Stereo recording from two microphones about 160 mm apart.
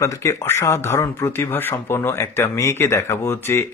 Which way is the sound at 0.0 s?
20° left (ahead or behind).